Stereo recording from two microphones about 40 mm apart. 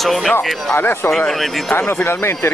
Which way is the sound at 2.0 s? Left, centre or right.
Left.